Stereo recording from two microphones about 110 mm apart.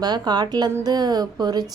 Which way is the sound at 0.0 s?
40° right (ahead or behind).